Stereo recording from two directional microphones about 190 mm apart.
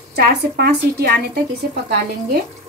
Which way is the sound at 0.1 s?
55° right (ahead or behind).